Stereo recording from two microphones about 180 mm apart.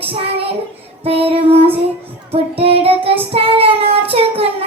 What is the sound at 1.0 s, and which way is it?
Female singing, 35° right (ahead or behind).